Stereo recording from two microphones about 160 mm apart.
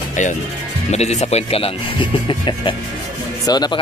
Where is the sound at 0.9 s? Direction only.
45° left (ahead or behind).